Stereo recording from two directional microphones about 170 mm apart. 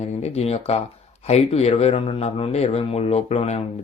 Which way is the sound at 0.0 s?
40° left (ahead or behind).